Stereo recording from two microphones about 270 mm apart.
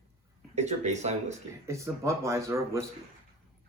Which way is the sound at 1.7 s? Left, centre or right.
Centre.